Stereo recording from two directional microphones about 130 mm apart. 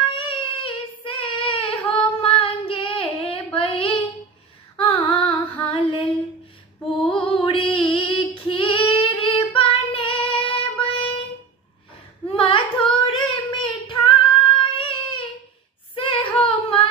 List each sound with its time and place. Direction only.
0.1 s child singing: 40° left (ahead or behind)
4.8 s female singing: 45° left (ahead or behind)
12.3 s female singing: 40° left (ahead or behind)
13.0 s child singing: 40° left (ahead or behind)